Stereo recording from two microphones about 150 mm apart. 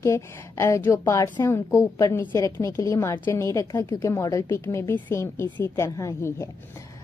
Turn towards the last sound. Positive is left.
turn(degrees=20)  # may be behind; listen again after turning